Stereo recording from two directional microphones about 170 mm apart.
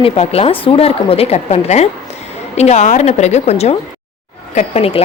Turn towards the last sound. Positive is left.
turn(degrees=35)  # may be behind; listen again after turning